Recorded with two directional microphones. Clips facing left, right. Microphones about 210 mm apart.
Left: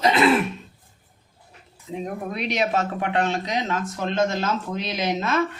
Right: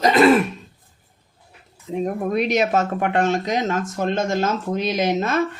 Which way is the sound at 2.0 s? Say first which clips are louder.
Right 8 dB; 45° right (ahead or behind).